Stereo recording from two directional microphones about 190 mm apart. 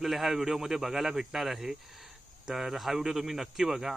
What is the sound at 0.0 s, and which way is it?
Speech, centre (ahead or behind).